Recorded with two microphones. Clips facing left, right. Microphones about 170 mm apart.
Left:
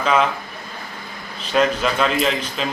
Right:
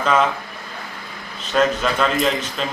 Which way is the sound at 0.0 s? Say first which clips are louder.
Even; centre (ahead or behind).